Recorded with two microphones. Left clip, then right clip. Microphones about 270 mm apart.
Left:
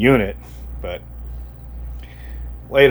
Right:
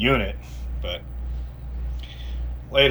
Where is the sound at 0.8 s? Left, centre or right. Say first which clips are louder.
Left 3 dB; centre.